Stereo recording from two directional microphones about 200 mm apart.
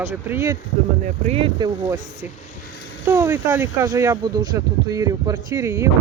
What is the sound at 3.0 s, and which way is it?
Speech, 15° right (ahead or behind).